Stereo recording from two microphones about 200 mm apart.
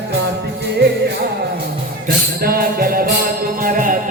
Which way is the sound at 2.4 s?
50° right (ahead or behind).